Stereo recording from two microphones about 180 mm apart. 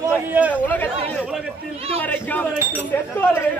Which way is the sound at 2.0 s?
10° left (ahead or behind).